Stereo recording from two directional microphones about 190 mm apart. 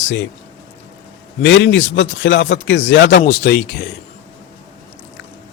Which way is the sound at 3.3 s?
60° left (ahead or behind).